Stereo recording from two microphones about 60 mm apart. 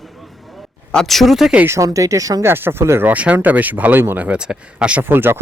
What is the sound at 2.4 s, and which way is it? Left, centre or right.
Speech, right.